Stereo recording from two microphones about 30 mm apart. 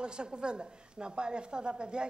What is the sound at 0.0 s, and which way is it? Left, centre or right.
A woman's voice, right.